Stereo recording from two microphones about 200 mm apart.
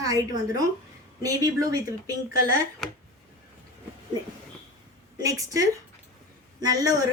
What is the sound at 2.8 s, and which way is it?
Speech, centre (ahead or behind).